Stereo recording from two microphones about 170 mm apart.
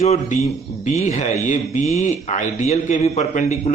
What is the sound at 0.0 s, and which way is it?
Speech, 40° left (ahead or behind).